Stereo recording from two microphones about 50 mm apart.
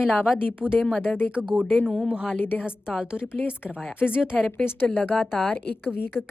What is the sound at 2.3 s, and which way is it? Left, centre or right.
Speech, left.